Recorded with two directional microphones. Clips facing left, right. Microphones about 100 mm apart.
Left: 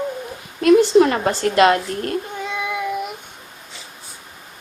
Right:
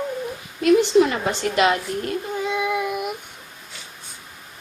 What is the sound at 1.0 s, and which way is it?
A woman's voice, 45° left (ahead or behind).